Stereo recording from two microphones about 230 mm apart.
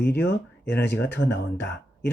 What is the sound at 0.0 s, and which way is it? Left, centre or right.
Speech, left.